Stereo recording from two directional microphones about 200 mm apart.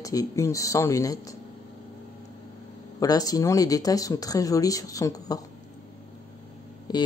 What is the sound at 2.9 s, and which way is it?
Speech, 20° left (ahead or behind).